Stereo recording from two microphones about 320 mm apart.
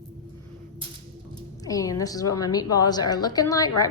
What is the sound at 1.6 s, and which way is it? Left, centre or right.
Speech, centre.